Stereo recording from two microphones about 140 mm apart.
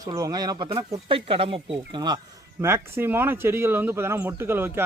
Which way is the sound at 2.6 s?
15° right (ahead or behind).